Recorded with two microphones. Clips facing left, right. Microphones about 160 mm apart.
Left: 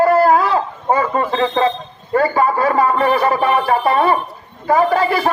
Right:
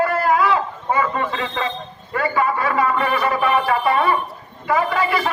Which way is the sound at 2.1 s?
40° left (ahead or behind).